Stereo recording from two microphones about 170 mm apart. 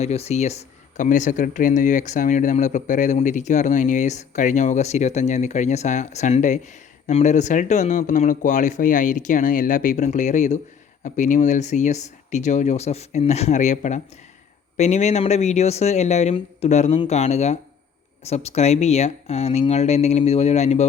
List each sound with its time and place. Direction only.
0.0 s speech: 40° left (ahead or behind)